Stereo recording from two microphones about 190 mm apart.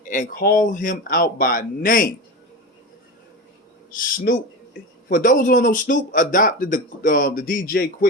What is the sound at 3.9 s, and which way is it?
Speech, 45° left (ahead or behind).